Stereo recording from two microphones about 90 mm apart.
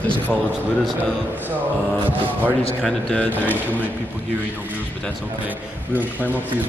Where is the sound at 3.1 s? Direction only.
20° left (ahead or behind).